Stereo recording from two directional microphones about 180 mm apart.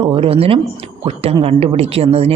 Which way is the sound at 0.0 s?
30° right (ahead or behind).